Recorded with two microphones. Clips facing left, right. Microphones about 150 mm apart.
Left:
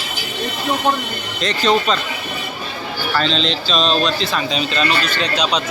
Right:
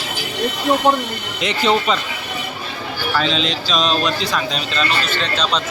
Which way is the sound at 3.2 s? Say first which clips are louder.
Left 1 dB; 5° right (ahead or behind).